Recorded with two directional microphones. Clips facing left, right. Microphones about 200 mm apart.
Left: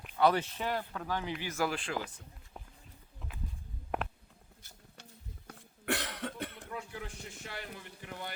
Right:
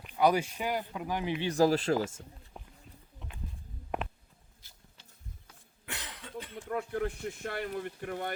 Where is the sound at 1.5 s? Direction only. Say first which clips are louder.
Right 10 dB; 35° right (ahead or behind).